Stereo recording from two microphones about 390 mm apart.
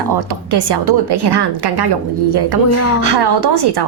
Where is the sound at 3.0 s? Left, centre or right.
Right.